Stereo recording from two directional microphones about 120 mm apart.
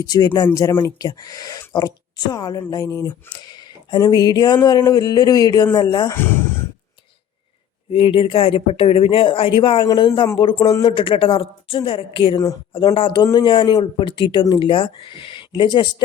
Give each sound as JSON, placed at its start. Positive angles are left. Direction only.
{"t": 0.0, "sound": "speech", "side_deg": 30}
{"t": 7.9, "sound": "speech", "side_deg": 50}
{"t": 10.8, "sound": "speech", "side_deg": 45}